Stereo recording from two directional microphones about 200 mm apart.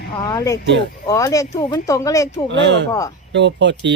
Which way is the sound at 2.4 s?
60° right (ahead or behind).